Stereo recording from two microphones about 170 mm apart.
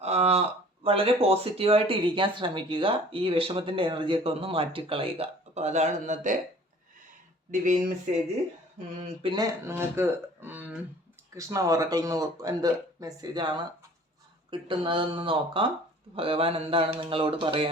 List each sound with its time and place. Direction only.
0.0 s speech: 40° right (ahead or behind)
7.5 s speech: 45° right (ahead or behind)
9.0 s speech: 40° right (ahead or behind)
9.3 s speech: 20° right (ahead or behind)
14.5 s speech: 30° right (ahead or behind)